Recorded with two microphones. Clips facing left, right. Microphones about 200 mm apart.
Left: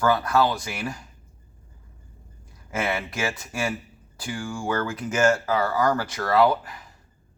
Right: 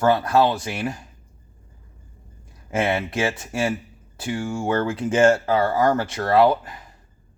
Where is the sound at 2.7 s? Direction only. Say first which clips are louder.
Right 5 dB; 30° right (ahead or behind).